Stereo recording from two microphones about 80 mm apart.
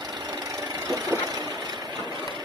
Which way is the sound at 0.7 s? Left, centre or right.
Right.